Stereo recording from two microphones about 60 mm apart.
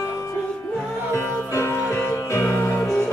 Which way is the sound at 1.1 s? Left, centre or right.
Left.